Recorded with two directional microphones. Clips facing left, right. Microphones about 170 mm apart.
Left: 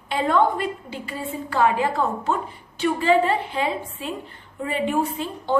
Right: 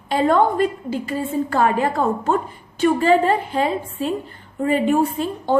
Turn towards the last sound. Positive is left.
turn(degrees=-45)  # may be behind; listen again after turning